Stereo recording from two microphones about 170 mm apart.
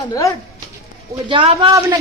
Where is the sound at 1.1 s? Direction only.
30° right (ahead or behind).